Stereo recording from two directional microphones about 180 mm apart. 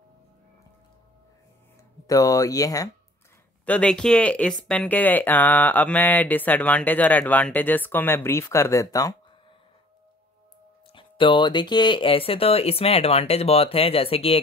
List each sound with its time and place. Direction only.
2.0 s speech: 20° left (ahead or behind)
3.6 s speech: 5° left (ahead or behind)
10.9 s speech: 30° left (ahead or behind)